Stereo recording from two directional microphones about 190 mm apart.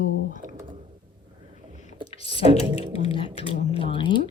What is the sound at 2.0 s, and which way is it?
Speech, 30° left (ahead or behind).